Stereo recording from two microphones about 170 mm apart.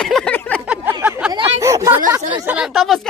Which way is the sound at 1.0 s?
5° right (ahead or behind).